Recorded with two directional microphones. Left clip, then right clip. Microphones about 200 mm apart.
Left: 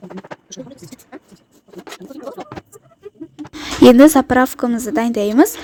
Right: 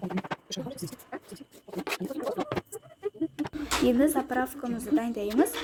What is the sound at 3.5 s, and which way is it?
A woman's voice, 50° left (ahead or behind).